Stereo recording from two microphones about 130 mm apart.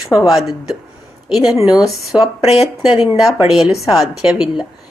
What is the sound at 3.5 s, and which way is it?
A woman's voice, centre (ahead or behind).